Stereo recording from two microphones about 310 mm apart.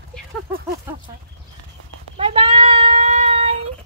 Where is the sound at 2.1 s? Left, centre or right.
Centre.